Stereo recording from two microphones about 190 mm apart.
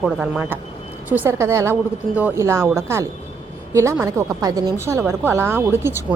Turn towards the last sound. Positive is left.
turn(degrees=-10)  # may be behind; listen again after turning